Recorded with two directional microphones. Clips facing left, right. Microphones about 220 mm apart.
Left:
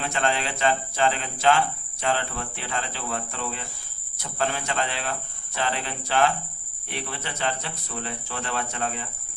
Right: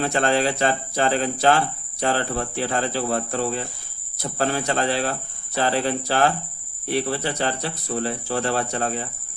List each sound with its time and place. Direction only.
0.0 s speech: 40° right (ahead or behind)